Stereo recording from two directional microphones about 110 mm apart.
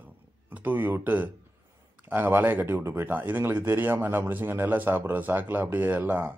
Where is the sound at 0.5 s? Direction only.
15° right (ahead or behind).